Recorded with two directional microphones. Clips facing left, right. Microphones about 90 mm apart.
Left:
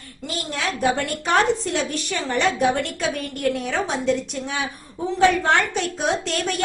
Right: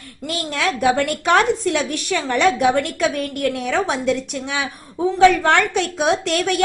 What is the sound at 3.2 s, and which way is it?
A woman's voice, 75° right (ahead or behind).